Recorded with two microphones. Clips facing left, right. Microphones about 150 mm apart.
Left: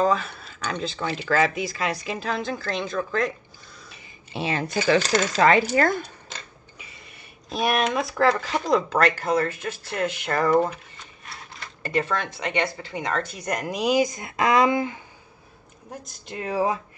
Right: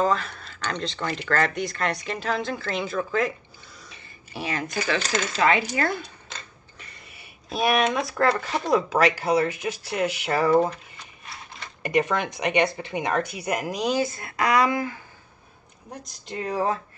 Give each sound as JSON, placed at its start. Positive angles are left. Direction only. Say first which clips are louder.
{"t": 0.0, "sound": "speech", "louder": "left 1 dB", "side_deg": 5}
{"t": 4.3, "sound": "speech", "louder": "left 3 dB", "side_deg": 25}
{"t": 6.8, "sound": "speech", "louder": "even", "side_deg": 0}
{"t": 11.8, "sound": "speech", "louder": "right 2 dB", "side_deg": -15}
{"t": 15.9, "sound": "speech", "louder": "right 1 dB", "side_deg": 0}